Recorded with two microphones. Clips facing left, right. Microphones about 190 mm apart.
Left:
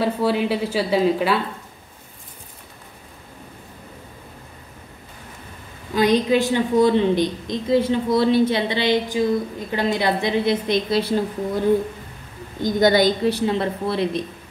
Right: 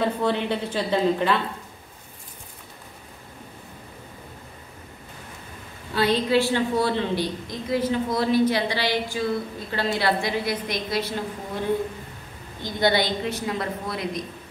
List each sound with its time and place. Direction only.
0.0 s a woman's voice: 5° left (ahead or behind)
5.9 s a woman's voice: 15° left (ahead or behind)
12.6 s a woman's voice: 45° left (ahead or behind)